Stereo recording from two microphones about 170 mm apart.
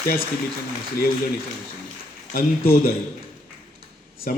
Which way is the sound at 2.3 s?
60° left (ahead or behind).